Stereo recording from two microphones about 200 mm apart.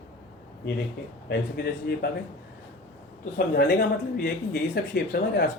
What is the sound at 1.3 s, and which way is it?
Speech, 50° left (ahead or behind).